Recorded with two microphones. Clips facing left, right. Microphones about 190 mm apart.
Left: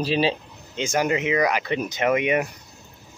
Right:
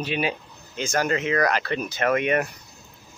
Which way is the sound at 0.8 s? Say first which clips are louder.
Left 2 dB; 15° left (ahead or behind).